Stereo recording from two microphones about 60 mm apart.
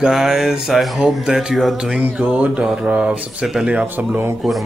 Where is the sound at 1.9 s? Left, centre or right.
Right.